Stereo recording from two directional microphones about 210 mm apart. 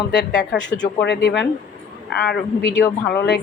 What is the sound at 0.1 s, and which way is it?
A woman's voice, 55° left (ahead or behind).